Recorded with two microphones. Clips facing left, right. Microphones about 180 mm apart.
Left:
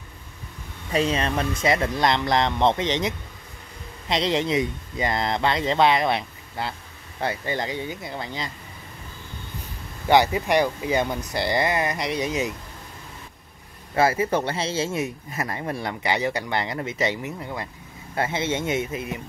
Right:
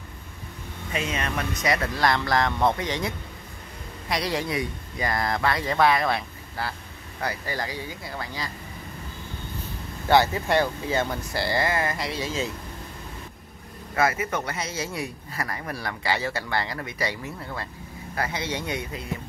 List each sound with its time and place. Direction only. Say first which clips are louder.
0.9 s a man's voice: left 6 dB; 30° left (ahead or behind)
10.0 s speech: left 2 dB; 15° left (ahead or behind)
13.9 s a man's voice: left 4 dB; 30° left (ahead or behind)